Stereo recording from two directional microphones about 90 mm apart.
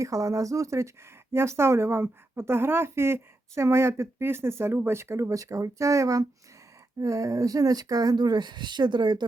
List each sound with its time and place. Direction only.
0.0 s a woman's voice: 35° right (ahead or behind); by 9.2 s 55° right (ahead or behind)